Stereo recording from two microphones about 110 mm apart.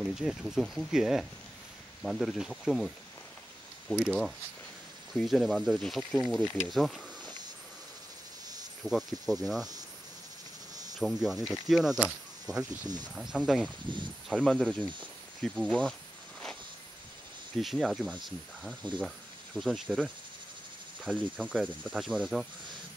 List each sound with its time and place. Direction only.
0.0 s speech: 5° right (ahead or behind)
3.9 s speech: 10° left (ahead or behind)
5.1 s speech: centre (ahead or behind)
8.8 s speech: 5° right (ahead or behind)
11.0 s speech: centre (ahead or behind)
12.8 s speech: 40° right (ahead or behind)
13.1 s speech: 5° right (ahead or behind)
13.8 s speech: 45° right (ahead or behind)
14.3 s speech: 5° left (ahead or behind)
17.6 s speech: centre (ahead or behind)
21.1 s speech: 5° right (ahead or behind)
21.9 s speech: centre (ahead or behind)